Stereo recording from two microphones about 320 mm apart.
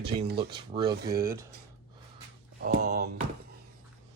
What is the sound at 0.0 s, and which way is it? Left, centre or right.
Speech, centre.